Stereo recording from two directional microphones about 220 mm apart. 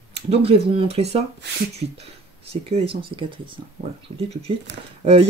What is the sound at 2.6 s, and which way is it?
Speech, 25° right (ahead or behind).